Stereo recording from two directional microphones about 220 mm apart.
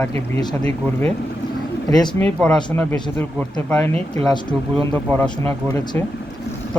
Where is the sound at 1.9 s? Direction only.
15° left (ahead or behind).